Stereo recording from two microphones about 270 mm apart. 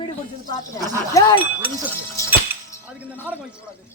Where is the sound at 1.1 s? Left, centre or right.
Centre.